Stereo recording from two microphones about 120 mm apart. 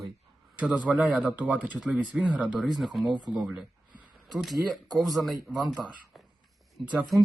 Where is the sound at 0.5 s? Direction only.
10° right (ahead or behind).